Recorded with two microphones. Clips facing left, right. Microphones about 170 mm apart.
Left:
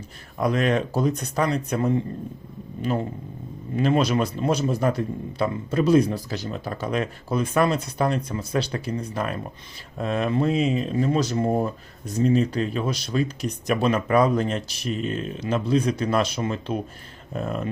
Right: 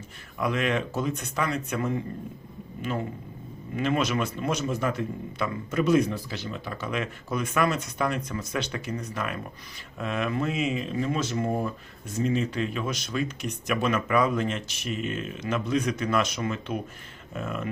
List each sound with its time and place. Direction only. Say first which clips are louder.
0.3 s speech: left 5 dB; 40° left (ahead or behind)